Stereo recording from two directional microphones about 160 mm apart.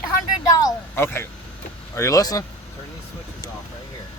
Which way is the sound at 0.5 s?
20° left (ahead or behind).